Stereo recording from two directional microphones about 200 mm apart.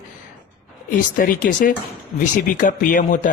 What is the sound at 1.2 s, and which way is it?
Speech, 45° left (ahead or behind).